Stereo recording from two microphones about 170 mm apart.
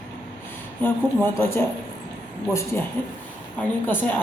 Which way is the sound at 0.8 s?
15° left (ahead or behind).